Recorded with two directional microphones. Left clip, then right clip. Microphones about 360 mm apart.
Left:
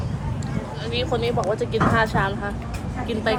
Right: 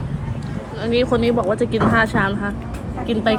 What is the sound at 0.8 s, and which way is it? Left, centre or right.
Speech, centre.